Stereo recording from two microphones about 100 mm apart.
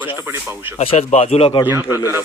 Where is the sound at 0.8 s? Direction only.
85° left.